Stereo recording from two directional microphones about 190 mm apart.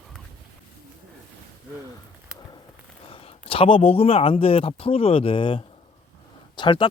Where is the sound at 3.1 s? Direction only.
30° left (ahead or behind).